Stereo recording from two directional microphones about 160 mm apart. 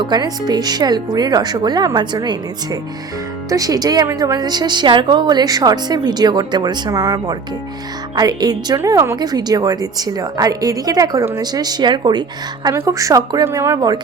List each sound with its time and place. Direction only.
0.0 s a woman's voice: 25° right (ahead or behind)
3.5 s a woman's voice: 20° right (ahead or behind)